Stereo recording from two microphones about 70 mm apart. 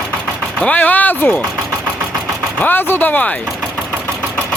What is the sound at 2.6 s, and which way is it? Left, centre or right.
Speech, left.